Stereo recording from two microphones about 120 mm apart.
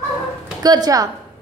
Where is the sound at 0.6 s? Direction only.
35° right (ahead or behind).